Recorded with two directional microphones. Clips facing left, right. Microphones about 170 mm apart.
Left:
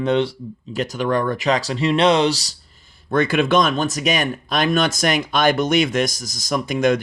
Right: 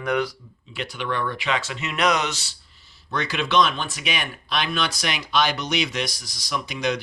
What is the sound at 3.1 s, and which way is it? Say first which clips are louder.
Speech: left 8 dB; 50° left (ahead or behind).